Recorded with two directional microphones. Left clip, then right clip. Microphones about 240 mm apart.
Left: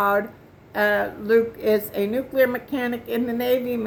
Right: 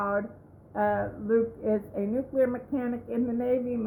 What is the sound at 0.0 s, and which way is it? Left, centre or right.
A woman's voice, centre.